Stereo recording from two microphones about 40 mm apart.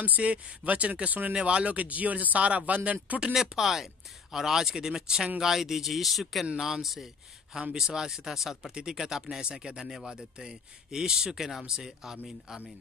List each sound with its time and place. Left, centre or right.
0.0 s speech: right
1.3 s speech: right
3.3 s speech: centre